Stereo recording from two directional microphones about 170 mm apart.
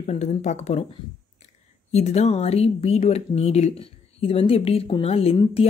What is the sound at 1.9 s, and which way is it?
Speech, 40° left (ahead or behind).